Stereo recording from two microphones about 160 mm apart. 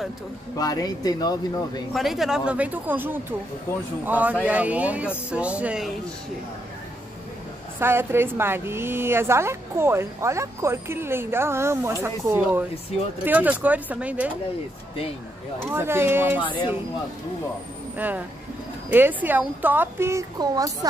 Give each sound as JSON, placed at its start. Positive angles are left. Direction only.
{"t": 0.6, "sound": "speech", "side_deg": 25}
{"t": 2.0, "sound": "a woman's voice", "side_deg": 0}
{"t": 7.8, "sound": "a woman's voice", "side_deg": -15}
{"t": 15.6, "sound": "a woman's voice", "side_deg": -15}
{"t": 17.9, "sound": "a woman's voice", "side_deg": -10}